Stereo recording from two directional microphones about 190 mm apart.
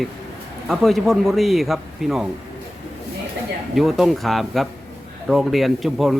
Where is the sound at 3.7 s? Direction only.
Centre (ahead or behind).